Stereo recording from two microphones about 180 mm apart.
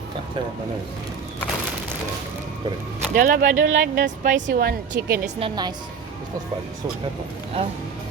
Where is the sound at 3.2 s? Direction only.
50° right (ahead or behind).